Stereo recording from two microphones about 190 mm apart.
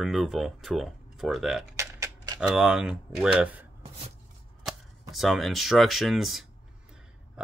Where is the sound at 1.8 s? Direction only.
15° right (ahead or behind).